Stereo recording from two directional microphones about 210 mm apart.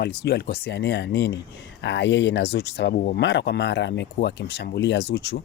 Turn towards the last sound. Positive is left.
turn(degrees=55)  # may be behind; listen again after turning